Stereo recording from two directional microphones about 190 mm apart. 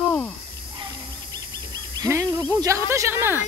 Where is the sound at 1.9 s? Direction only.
20° right (ahead or behind).